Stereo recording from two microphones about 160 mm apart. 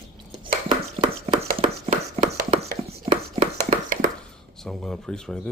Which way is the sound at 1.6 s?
40° right (ahead or behind).